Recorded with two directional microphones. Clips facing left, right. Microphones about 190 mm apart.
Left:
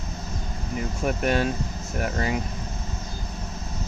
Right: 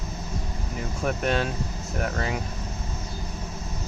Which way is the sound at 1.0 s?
5° left (ahead or behind).